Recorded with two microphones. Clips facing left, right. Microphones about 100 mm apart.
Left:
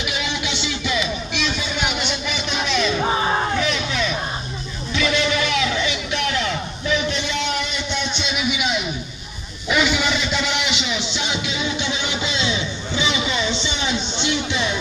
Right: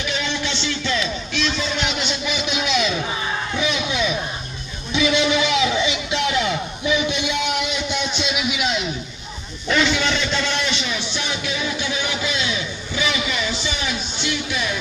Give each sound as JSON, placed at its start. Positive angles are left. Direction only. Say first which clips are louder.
{"t": 0.0, "sound": "music", "louder": "right 1 dB", "side_deg": 15}
{"t": 3.0, "sound": "music", "louder": "left 6 dB", "side_deg": 40}
{"t": 3.5, "sound": "music", "louder": "even", "side_deg": -10}
{"t": 4.9, "sound": "a sound", "louder": "right 2 dB", "side_deg": -15}
{"t": 9.7, "sound": "music", "louder": "even", "side_deg": 10}